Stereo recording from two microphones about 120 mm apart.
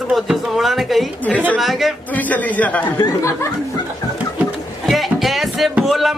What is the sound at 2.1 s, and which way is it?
Speech, 15° left (ahead or behind).